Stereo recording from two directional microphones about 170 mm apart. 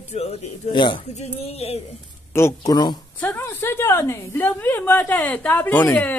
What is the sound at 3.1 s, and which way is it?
A woman's voice, 10° left (ahead or behind).